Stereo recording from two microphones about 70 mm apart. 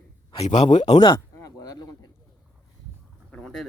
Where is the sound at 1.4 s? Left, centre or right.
Left.